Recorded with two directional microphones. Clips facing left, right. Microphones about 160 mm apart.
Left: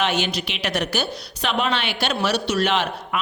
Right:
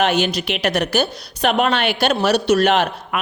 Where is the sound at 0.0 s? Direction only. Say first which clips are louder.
Right 5 dB; 45° right (ahead or behind).